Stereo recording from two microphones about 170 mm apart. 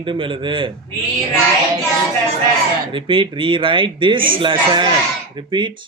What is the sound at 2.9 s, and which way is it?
Speech, 30° right (ahead or behind).